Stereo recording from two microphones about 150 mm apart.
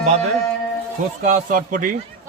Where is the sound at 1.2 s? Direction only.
65° right (ahead or behind).